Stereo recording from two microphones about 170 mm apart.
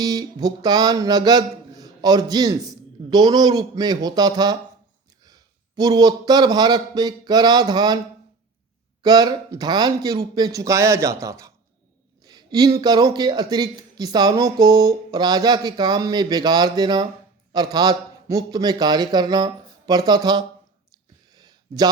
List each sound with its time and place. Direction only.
0.0 s music: 25° right (ahead or behind)
5.2 s a man's voice: 25° right (ahead or behind)
9.0 s music: 25° right (ahead or behind)
12.2 s a sound: 25° right (ahead or behind)
12.8 s music: 25° right (ahead or behind)
21.3 s a sound: 25° right (ahead or behind)